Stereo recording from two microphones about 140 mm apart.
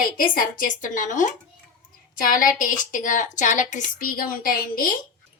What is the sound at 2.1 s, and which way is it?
A woman's voice, 80° left.